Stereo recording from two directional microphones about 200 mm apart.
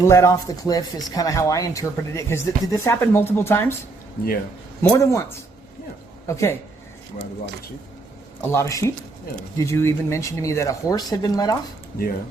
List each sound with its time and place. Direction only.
0.0 s speech: 15° left (ahead or behind)
4.8 s speech: 15° left (ahead or behind)
6.2 s speech: 15° left (ahead or behind)
8.4 s speech: 15° left (ahead or behind)